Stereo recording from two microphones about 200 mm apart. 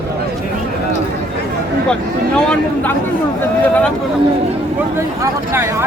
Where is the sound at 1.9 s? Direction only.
5° left (ahead or behind).